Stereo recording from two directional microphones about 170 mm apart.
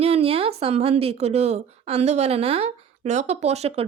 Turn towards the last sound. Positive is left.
turn(degrees=-40)  # may be behind; listen again after turning